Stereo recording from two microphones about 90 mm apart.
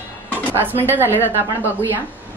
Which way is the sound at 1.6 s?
20° right (ahead or behind).